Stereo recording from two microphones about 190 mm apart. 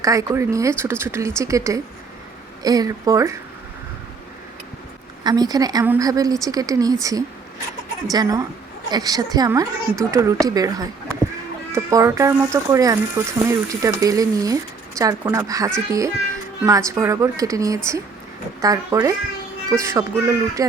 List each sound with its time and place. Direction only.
0.0 s speech: 15° right (ahead or behind)
5.2 s speech: 20° right (ahead or behind)